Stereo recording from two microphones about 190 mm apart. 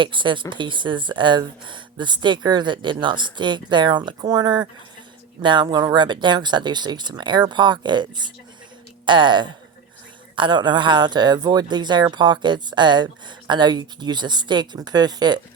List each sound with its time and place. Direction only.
0.0 s speech: 25° right (ahead or behind)